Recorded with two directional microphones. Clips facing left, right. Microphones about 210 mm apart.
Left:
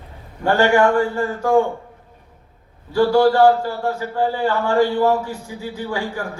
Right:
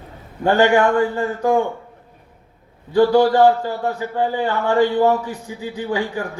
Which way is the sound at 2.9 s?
20° right (ahead or behind).